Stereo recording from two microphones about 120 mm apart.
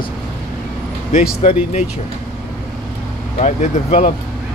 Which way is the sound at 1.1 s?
65° left (ahead or behind).